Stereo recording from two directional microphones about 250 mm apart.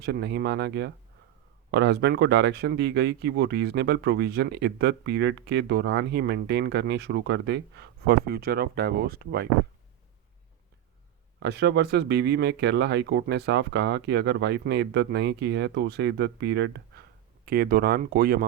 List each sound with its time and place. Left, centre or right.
0.0 s speech: right
11.3 s speech: right